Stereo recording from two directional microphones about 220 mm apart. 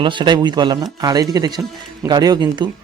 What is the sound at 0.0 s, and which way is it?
Speech, 20° right (ahead or behind).